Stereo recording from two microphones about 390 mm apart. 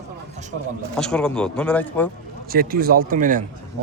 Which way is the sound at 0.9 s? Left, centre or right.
Centre.